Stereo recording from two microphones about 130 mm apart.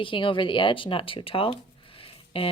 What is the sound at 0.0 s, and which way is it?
Speech, 40° left (ahead or behind).